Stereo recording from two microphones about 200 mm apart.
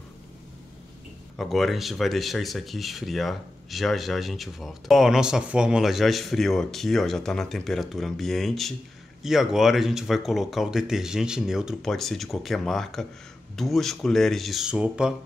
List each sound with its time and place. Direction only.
1.3 s speech: centre (ahead or behind)